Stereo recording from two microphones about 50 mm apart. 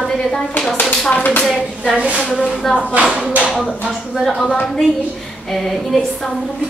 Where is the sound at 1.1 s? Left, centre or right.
Left.